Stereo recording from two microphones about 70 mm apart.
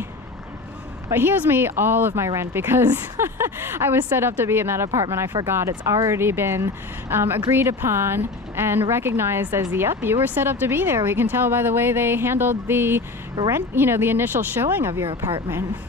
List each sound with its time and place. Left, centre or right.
1.1 s speech: right